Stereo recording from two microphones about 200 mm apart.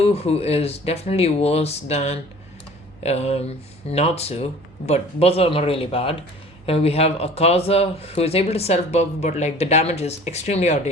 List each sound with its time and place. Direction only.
0.0 s speech: 30° left (ahead or behind)